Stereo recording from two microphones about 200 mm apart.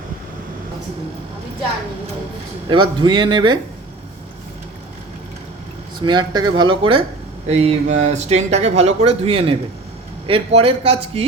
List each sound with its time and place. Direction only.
2.6 s a man's voice: 25° right (ahead or behind)
6.1 s a man's voice: 20° right (ahead or behind)